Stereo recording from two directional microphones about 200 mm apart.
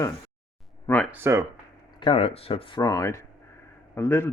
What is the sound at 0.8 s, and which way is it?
Speech, 10° left (ahead or behind).